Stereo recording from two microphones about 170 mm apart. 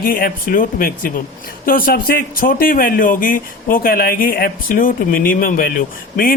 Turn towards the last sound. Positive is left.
turn(degrees=60)  # may be behind; listen again after turning